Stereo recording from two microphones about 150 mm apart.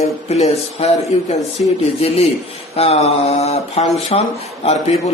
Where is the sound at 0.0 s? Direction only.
45° left (ahead or behind).